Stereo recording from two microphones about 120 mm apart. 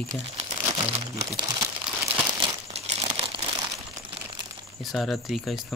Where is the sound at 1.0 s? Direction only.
30° right (ahead or behind).